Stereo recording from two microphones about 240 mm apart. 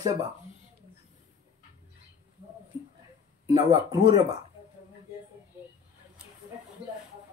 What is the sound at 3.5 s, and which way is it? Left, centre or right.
Speech, centre.